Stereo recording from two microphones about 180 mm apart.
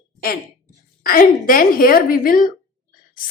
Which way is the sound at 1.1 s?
50° left (ahead or behind).